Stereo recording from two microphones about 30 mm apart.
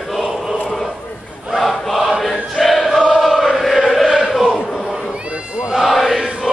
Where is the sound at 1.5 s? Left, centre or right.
Centre.